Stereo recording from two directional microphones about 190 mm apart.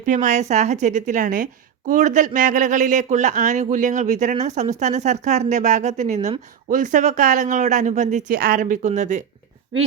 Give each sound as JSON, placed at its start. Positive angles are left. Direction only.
{"t": 0.0, "sound": "speech", "side_deg": -40}